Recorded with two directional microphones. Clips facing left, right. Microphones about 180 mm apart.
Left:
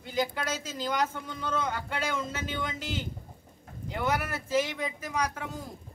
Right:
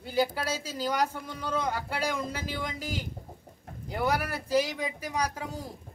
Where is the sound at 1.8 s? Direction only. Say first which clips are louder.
Right 1 dB; 35° right (ahead or behind).